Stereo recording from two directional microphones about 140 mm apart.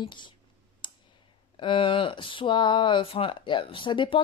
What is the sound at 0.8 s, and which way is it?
Clicking, 35° left (ahead or behind).